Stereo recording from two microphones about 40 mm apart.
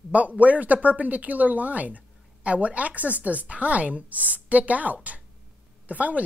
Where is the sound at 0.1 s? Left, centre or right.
Right.